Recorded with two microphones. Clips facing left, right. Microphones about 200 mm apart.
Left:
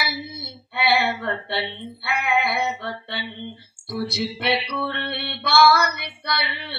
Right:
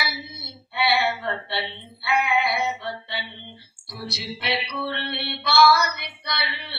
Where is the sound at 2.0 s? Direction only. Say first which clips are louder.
Right 1 dB; 55° left (ahead or behind).